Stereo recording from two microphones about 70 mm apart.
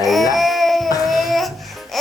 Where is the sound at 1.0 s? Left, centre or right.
Centre.